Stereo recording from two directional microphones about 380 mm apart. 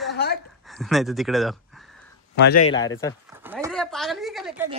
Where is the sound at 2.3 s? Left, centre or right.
Left.